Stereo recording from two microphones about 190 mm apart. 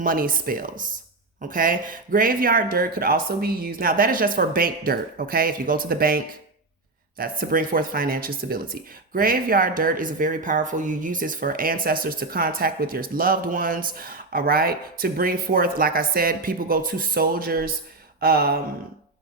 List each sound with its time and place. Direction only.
0.0 s speech: 45° right (ahead or behind)